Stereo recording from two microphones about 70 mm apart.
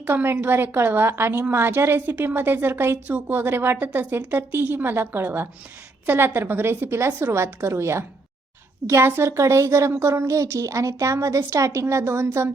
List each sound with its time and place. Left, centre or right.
0.0 s a woman's voice: right